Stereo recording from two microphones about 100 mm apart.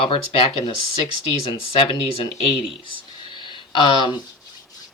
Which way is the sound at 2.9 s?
50° left (ahead or behind).